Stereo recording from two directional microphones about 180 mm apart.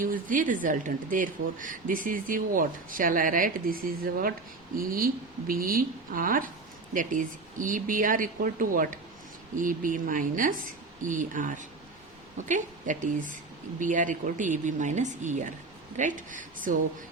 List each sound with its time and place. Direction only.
0.0 s speech: 50° right (ahead or behind)